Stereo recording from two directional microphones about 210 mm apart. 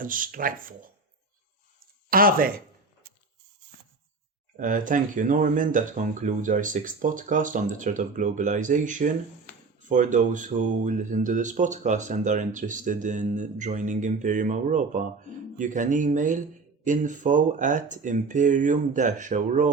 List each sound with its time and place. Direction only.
0.0 s speech: 40° right (ahead or behind)
2.0 s speech: 45° right (ahead or behind)
4.5 s speech: 40° right (ahead or behind)